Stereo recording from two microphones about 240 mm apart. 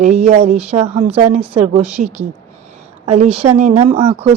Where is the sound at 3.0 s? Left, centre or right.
Right.